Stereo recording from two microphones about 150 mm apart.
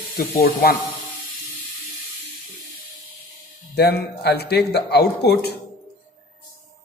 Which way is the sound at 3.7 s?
90° left.